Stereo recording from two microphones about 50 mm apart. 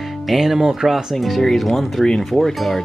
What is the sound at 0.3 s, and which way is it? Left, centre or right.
Speech, centre.